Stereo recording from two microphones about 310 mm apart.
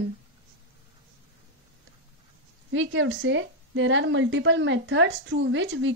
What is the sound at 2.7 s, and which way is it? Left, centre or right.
Speech, right.